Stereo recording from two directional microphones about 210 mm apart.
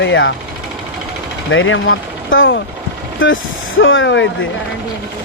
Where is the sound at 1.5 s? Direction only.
65° left (ahead or behind).